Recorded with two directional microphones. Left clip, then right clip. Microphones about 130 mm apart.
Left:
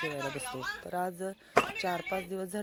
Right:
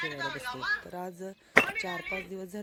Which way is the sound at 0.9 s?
5° left (ahead or behind).